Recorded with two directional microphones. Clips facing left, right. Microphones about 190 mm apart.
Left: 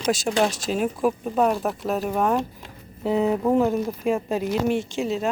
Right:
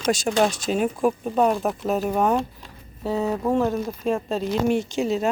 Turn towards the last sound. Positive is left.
turn(degrees=0)  # may be behind; listen again after turning